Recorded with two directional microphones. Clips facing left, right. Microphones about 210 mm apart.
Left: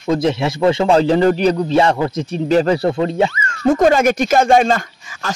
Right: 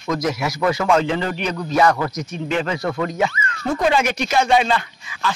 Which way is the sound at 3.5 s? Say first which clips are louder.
Left 10 dB; 45° left (ahead or behind).